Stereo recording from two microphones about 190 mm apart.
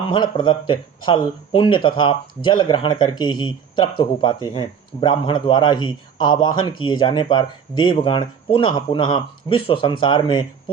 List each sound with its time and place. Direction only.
0.0 s speech: 25° left (ahead or behind)